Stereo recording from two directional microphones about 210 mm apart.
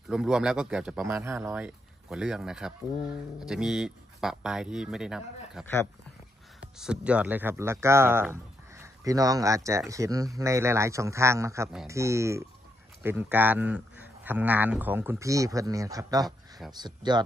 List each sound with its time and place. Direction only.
0.1 s speech: 5° right (ahead or behind)
6.8 s speech: 5° right (ahead or behind)